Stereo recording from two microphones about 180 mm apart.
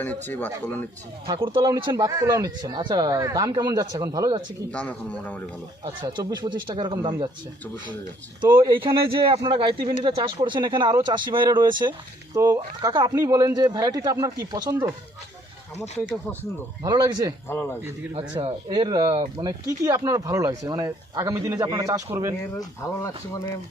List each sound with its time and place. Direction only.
0.0 s speech: 10° left (ahead or behind)
1.3 s speech: 25° right (ahead or behind)
4.7 s speech: 5° left (ahead or behind)
5.8 s speech: 25° right (ahead or behind)
8.4 s speech: 25° right (ahead or behind)
16.4 s speech: 20° right (ahead or behind)
17.5 s speech: 15° left (ahead or behind)
18.1 s speech: 25° right (ahead or behind)
22.4 s speech: 15° left (ahead or behind)